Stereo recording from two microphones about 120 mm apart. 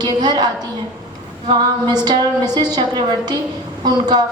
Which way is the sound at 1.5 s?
40° right (ahead or behind).